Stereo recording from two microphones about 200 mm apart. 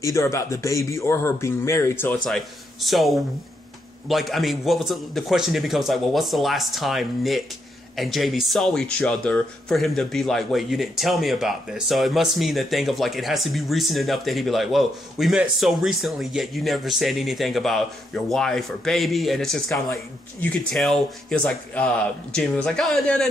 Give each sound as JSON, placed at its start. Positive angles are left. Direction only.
{"t": 0.0, "sound": "speech", "side_deg": 15}
{"t": 2.2, "sound": "speech", "side_deg": 0}